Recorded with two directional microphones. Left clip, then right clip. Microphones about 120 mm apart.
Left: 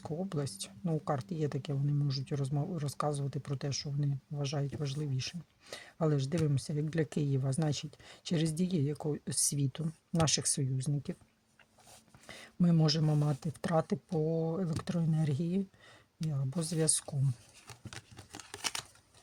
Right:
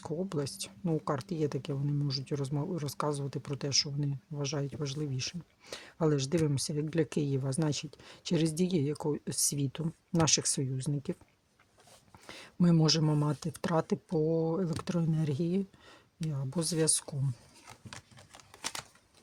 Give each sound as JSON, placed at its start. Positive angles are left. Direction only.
{"t": 0.0, "sound": "speech", "side_deg": -30}
{"t": 12.2, "sound": "speech", "side_deg": -30}
{"t": 18.5, "sound": "a sound", "side_deg": 5}